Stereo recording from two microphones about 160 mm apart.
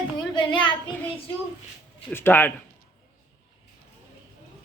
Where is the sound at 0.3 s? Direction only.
30° left (ahead or behind).